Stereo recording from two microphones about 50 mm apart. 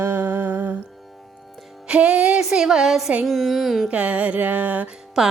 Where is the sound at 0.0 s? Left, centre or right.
Right.